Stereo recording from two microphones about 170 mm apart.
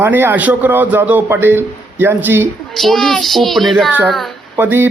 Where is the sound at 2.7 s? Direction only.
Centre (ahead or behind).